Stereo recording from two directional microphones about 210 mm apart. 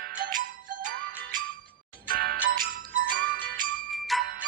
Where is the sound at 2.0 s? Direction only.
45° right (ahead or behind).